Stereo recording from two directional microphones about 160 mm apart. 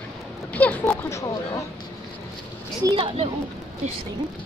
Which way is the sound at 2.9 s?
30° right (ahead or behind).